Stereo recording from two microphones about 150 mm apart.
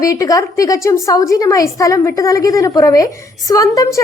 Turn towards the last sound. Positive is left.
turn(degrees=25)  # may be behind; listen again after turning